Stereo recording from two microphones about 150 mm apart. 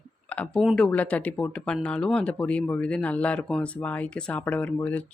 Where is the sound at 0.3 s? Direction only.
10° left (ahead or behind).